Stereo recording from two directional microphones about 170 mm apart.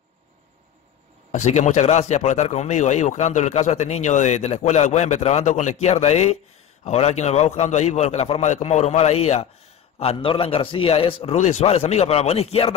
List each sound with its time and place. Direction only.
1.3 s speech: 40° left (ahead or behind)